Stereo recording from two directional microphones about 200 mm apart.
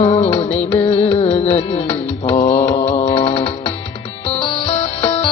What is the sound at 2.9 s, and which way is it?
Music, 35° left (ahead or behind).